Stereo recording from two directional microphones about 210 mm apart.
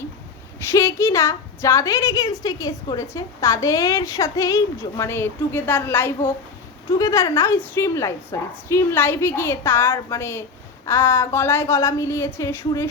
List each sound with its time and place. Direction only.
0.7 s a woman's voice: 15° left (ahead or behind)